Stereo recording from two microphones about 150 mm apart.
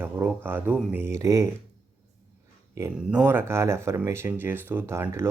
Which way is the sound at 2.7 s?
15° right (ahead or behind).